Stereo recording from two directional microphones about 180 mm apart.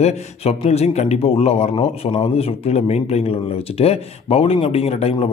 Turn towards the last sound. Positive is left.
turn(degrees=35)  # may be behind; listen again after turning